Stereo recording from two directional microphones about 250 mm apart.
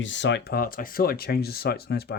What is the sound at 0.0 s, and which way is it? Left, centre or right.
Speech, left.